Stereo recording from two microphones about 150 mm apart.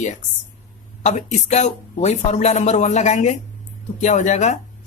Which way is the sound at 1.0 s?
50° left (ahead or behind).